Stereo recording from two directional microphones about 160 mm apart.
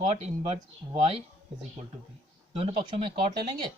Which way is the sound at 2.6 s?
35° right (ahead or behind).